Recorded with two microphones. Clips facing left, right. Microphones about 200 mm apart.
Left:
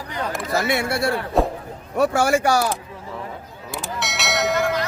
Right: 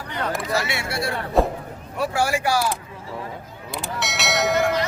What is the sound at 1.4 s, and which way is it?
Speech, centre (ahead or behind).